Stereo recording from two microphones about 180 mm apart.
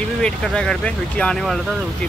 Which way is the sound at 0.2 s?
5° left (ahead or behind).